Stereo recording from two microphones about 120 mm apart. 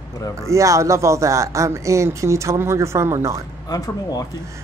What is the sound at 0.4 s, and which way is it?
Speech, 25° right (ahead or behind).